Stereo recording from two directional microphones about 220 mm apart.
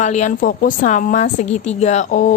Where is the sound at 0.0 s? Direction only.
35° left (ahead or behind).